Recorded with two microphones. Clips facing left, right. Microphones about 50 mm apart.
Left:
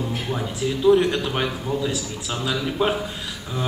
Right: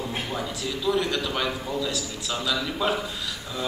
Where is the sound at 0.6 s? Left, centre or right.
Left.